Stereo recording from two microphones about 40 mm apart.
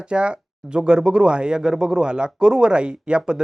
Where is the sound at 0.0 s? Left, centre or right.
Right.